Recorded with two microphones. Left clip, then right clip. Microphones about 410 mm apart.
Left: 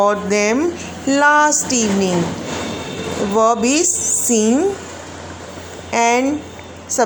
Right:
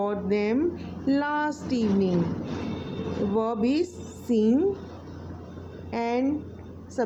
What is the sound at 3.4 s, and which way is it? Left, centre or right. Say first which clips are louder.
A woman's voice: left 12 dB; right.